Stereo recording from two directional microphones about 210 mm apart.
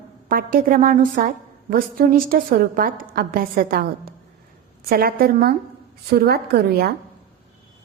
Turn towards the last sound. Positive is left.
turn(degrees=-50)  # may be behind; listen again after turning